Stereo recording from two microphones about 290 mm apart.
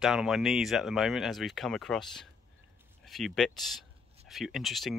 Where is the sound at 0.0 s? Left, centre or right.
Centre.